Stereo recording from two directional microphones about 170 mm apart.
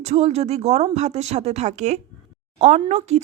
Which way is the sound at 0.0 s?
40° right (ahead or behind).